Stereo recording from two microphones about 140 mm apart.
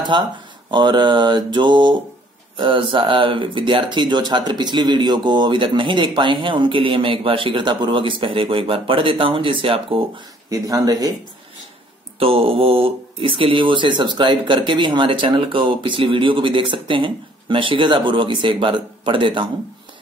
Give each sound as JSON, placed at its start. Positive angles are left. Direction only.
{"t": 0.1, "sound": "speech", "side_deg": -35}
{"t": 10.5, "sound": "speech", "side_deg": -25}
{"t": 12.2, "sound": "speech", "side_deg": -40}